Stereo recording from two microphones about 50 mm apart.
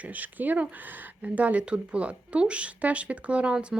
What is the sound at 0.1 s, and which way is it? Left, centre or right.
Speech, right.